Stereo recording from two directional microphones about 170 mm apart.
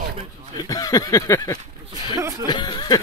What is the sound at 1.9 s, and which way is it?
Speech, 15° right (ahead or behind).